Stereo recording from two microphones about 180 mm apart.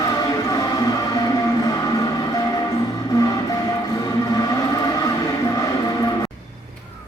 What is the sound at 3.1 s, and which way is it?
Train, 20° left (ahead or behind).